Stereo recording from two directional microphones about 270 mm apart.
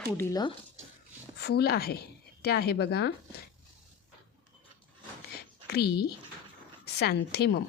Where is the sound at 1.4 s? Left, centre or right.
Left.